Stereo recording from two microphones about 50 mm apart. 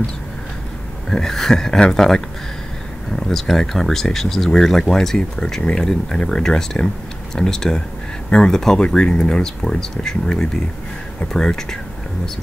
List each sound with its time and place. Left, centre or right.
1.1 s speech: centre
3.3 s speech: centre